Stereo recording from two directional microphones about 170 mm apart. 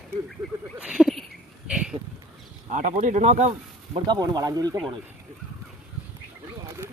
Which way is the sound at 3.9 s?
25° right (ahead or behind).